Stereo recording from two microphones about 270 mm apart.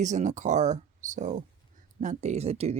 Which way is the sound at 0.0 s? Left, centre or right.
Right.